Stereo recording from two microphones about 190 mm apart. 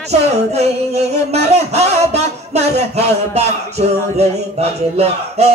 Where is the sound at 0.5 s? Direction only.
35° right (ahead or behind).